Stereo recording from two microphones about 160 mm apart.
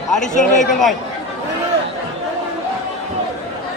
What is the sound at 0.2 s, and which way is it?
Speech, 50° left (ahead or behind).